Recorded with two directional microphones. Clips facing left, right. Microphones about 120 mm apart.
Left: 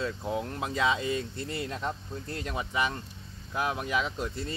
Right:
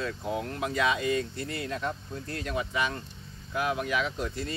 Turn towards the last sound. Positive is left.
turn(degrees=20)  # may be behind; listen again after turning